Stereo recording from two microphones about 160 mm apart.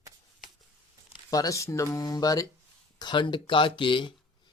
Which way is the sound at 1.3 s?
20° left (ahead or behind).